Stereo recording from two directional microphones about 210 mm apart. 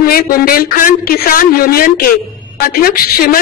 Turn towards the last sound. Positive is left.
turn(degrees=45)  # may be behind; listen again after turning